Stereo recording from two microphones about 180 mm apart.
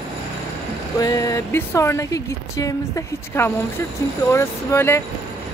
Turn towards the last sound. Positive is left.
turn(degrees=15)  # may be behind; listen again after turning